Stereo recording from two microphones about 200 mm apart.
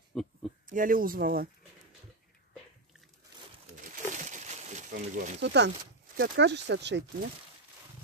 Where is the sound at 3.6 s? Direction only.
40° right (ahead or behind).